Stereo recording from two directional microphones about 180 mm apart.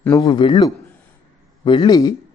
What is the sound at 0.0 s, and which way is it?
Speech, 15° left (ahead or behind).